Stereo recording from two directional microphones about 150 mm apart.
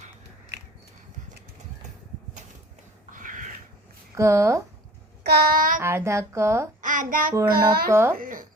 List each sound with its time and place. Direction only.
3.1 s a sound: 60° right (ahead or behind)
4.1 s speech: 20° right (ahead or behind)
5.2 s child singing: 90° right; by 5.8 s 65° right (ahead or behind)
5.8 s speech: 20° right (ahead or behind)
6.8 s a child's voice: 60° right (ahead or behind)
7.4 s a child's voice: 85° right
7.9 s speech: 15° right (ahead or behind)
8.1 s a sound: 65° right (ahead or behind)